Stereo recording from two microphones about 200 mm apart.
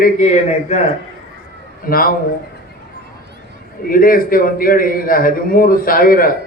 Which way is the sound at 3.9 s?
45° left (ahead or behind).